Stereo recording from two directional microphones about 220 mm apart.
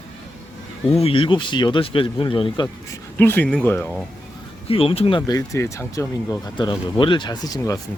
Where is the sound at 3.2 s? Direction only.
10° left (ahead or behind).